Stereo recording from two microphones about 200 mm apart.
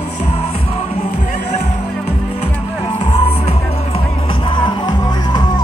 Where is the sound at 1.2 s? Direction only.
35° left (ahead or behind).